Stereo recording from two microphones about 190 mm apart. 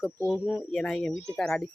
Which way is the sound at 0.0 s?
5° left (ahead or behind).